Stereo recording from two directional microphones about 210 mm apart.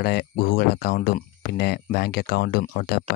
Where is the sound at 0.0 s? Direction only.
50° left (ahead or behind).